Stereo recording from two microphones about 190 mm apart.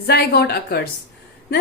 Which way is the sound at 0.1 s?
60° left (ahead or behind).